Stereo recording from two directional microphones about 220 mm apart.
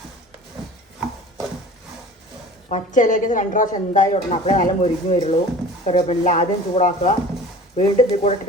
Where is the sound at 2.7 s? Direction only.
35° left (ahead or behind).